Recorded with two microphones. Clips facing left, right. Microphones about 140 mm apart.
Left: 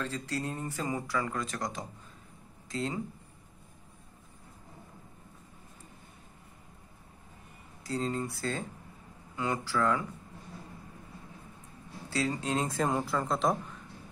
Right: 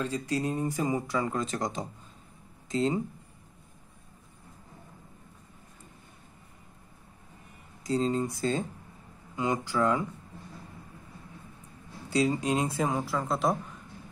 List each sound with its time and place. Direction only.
0.0 s speech: 15° right (ahead or behind)
7.8 s speech: 20° right (ahead or behind)
12.1 s speech: 15° right (ahead or behind)